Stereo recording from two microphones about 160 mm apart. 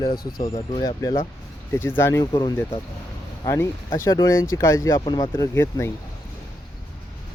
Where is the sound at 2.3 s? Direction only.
25° left (ahead or behind).